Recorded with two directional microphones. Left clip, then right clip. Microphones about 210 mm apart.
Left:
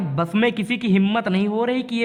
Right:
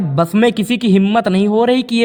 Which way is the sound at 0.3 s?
20° right (ahead or behind).